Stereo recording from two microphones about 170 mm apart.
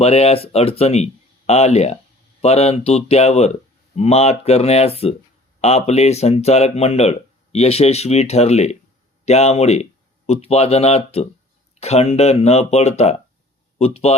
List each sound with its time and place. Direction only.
0.0 s speech: 35° left (ahead or behind)